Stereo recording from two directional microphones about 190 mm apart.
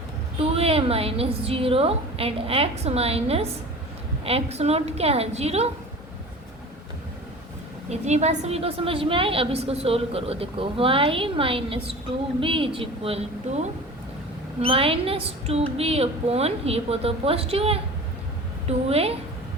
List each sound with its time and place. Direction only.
0.3 s a woman's voice: 30° right (ahead or behind)
7.9 s a woman's voice: 35° right (ahead or behind)
18.9 s a woman's voice: 30° right (ahead or behind)